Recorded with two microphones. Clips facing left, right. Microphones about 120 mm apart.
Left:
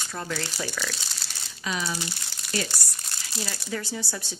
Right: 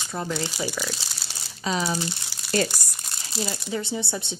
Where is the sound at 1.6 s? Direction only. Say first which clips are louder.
Right 5 dB; 35° right (ahead or behind).